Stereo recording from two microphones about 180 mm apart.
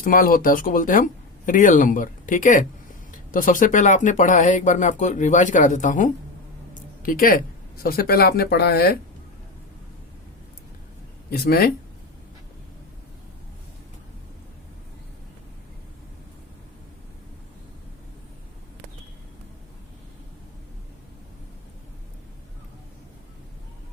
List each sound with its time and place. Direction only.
0.0 s speech: 50° left (ahead or behind)
11.3 s speech: 60° left (ahead or behind)